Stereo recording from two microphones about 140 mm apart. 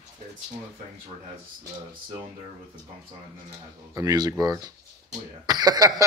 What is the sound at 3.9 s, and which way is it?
Chuckle, 25° right (ahead or behind).